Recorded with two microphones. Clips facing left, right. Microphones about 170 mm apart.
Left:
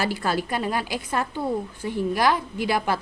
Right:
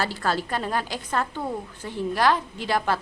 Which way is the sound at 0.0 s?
15° left (ahead or behind).